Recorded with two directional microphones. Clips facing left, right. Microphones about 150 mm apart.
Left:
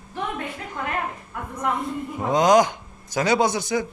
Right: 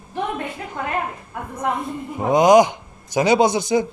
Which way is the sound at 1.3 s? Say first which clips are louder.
Right 2 dB; 30° right (ahead or behind).